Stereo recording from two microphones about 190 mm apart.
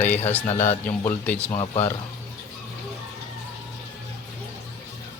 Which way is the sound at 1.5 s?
25° left (ahead or behind).